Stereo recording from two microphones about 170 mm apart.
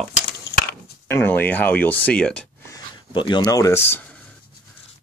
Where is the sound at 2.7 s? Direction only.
25° left (ahead or behind).